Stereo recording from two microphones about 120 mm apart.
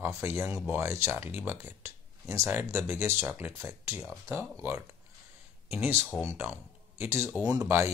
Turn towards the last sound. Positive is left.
turn(degrees=-20)  # may be behind; listen again after turning